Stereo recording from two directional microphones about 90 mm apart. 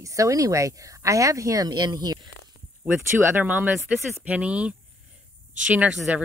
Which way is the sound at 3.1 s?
25° right (ahead or behind).